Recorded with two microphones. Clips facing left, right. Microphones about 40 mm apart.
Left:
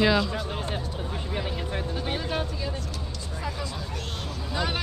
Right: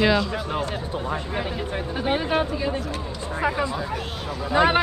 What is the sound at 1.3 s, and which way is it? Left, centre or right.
Speech, centre.